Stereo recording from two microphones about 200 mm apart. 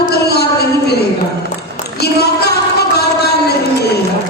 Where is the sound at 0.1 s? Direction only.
55° left (ahead or behind).